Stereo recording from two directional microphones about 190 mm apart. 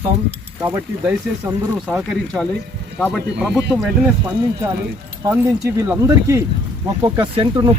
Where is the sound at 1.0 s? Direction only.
5° right (ahead or behind).